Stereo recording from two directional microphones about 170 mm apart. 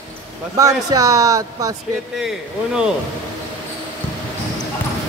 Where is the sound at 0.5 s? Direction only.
20° right (ahead or behind).